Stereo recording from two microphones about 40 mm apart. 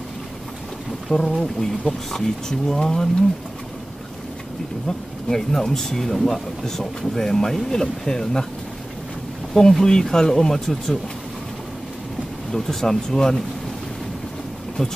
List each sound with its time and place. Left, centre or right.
1.1 s speech: centre
4.8 s speech: centre
9.5 s speech: centre
12.5 s speech: centre